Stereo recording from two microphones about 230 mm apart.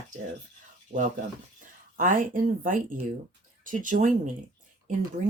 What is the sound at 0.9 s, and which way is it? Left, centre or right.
Speech, right.